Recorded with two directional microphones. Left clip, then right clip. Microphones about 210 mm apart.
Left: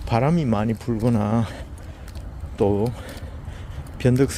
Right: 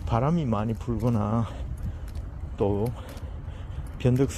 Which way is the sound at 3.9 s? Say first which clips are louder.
Left 5 dB; 15° left (ahead or behind).